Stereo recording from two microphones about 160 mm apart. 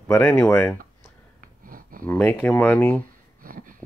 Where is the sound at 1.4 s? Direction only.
60° right (ahead or behind).